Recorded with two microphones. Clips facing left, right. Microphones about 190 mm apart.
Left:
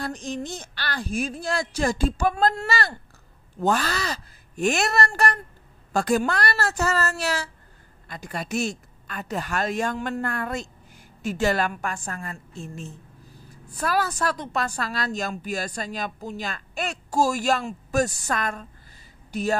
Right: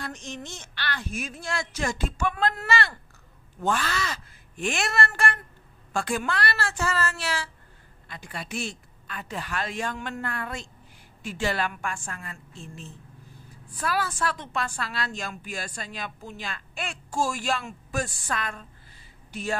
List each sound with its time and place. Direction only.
0.0 s a woman's voice: 35° left (ahead or behind)